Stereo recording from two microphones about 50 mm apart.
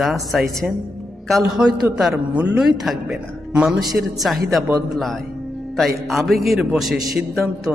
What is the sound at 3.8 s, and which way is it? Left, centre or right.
Speech, centre.